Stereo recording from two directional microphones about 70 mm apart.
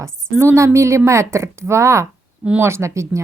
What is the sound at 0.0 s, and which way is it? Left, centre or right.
A woman's voice, right.